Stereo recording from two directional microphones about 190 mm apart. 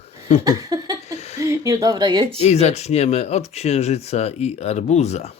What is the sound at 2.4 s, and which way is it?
Speech, 35° left (ahead or behind).